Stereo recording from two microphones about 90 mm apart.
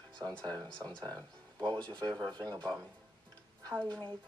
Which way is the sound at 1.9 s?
10° left (ahead or behind).